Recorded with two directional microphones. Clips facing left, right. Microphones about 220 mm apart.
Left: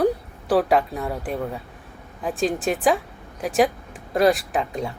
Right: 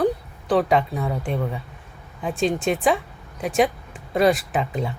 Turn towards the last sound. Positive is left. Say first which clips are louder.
# even
turn(degrees=0)  # may be behind; listen again after turning